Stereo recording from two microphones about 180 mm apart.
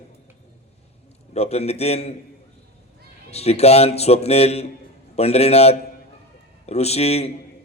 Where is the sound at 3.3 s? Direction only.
35° left (ahead or behind).